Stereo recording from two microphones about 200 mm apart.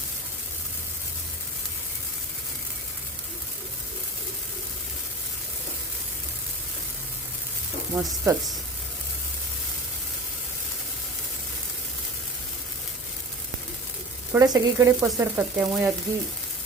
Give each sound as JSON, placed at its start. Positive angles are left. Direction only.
{"t": 7.9, "sound": "frying", "side_deg": -10}
{"t": 14.3, "sound": "frying", "side_deg": -15}